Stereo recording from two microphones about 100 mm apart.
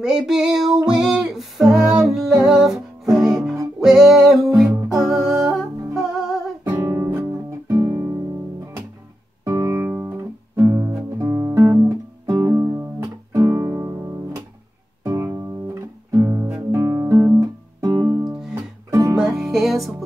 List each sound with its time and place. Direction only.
0.0 s music: 5° right (ahead or behind)
6.8 s music: 30° right (ahead or behind)
9.4 s guitar: 30° right (ahead or behind)
9.8 s music: 20° right (ahead or behind)
10.5 s guitar: 30° right (ahead or behind)
15.0 s music: 30° right (ahead or behind)
16.1 s guitar: 25° right (ahead or behind)
17.1 s guitar: 25° right (ahead or behind)
18.9 s music: 30° right (ahead or behind)
19.2 s music: 5° right (ahead or behind)